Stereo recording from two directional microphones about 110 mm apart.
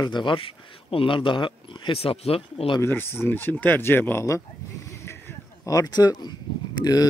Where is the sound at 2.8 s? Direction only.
20° left (ahead or behind).